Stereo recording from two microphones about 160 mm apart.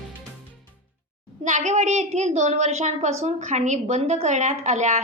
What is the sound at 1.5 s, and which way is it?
A woman's voice, 50° right (ahead or behind).